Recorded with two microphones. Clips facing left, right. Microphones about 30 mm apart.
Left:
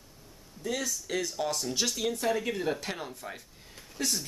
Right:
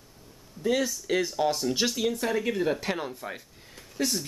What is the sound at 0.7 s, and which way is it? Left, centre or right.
Speech, centre.